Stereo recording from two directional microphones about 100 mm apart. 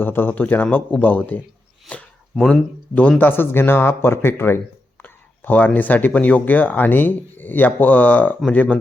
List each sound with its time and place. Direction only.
0.0 s a man's voice: 20° left (ahead or behind)